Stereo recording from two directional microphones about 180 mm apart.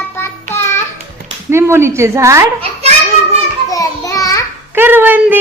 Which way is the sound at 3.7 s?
20° left (ahead or behind).